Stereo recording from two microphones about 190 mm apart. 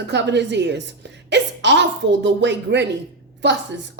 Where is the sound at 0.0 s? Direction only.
65° right (ahead or behind).